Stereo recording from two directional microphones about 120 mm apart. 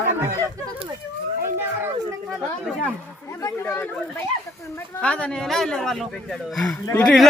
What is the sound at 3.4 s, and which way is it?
Speech, 15° left (ahead or behind).